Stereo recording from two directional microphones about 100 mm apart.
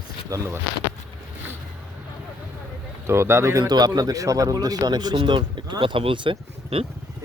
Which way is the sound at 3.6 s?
45° right (ahead or behind).